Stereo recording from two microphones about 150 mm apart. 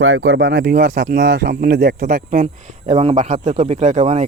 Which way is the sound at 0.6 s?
90° right.